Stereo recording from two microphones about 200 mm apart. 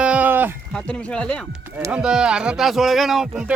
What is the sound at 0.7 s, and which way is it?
Speech, 5° left (ahead or behind).